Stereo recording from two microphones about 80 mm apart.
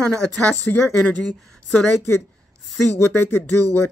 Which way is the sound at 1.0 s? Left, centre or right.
Centre.